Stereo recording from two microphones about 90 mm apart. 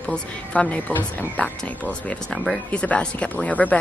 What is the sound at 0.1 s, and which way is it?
A woman's voice, 15° left (ahead or behind).